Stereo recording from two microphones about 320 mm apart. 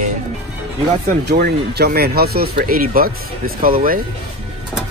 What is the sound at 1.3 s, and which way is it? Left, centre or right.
Speech, right.